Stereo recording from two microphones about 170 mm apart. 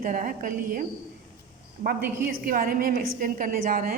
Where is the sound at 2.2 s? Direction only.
60° right (ahead or behind).